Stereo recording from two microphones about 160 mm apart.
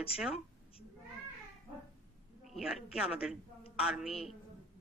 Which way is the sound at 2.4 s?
Centre (ahead or behind).